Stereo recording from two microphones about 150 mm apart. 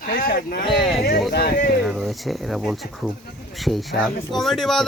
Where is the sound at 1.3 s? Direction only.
80° left.